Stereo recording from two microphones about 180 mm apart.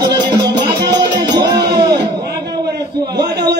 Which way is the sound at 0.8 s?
25° right (ahead or behind).